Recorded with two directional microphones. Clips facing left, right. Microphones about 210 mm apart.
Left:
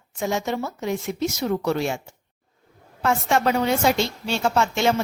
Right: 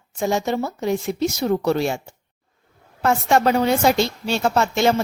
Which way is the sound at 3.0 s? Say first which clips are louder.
Right 3 dB; 40° right (ahead or behind).